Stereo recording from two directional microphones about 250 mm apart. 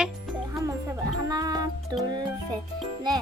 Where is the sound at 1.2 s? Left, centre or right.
Centre.